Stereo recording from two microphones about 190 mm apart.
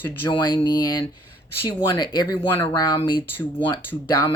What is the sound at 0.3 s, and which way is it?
Speech, 25° left (ahead or behind).